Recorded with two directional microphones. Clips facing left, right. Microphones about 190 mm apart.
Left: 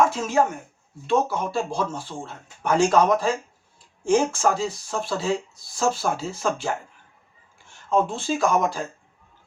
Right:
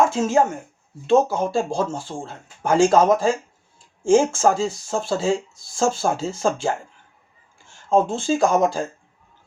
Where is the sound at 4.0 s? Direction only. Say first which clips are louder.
Right 4 dB; 25° right (ahead or behind).